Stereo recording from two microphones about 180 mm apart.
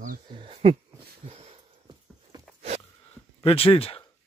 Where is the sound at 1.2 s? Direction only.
30° right (ahead or behind).